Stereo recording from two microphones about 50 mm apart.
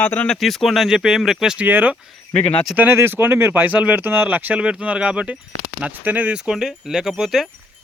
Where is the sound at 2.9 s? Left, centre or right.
Right.